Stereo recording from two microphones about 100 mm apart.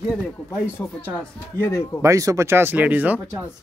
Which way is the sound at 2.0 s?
30° right (ahead or behind).